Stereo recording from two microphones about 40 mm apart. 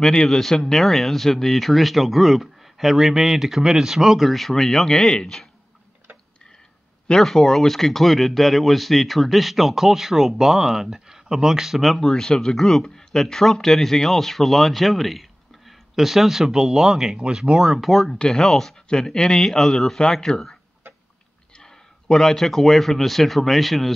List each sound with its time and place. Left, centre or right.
0.0 s a man's voice: centre
7.2 s speech: centre
11.8 s a man's voice: centre
18.1 s speech: centre
18.4 s a man's voice: centre
19.0 s a man's voice: centre
20.0 s a man's voice: centre
21.5 s speech: centre